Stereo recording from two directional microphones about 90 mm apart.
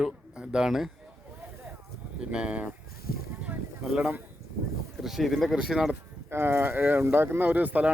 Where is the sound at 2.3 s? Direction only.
10° right (ahead or behind).